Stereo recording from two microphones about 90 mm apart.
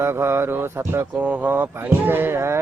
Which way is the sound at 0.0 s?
30° right (ahead or behind).